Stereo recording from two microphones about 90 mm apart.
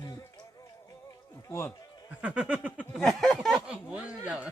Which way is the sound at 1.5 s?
30° left (ahead or behind).